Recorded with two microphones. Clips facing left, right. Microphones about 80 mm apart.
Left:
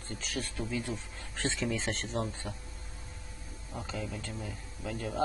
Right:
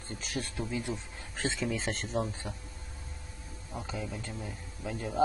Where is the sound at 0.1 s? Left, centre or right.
Centre.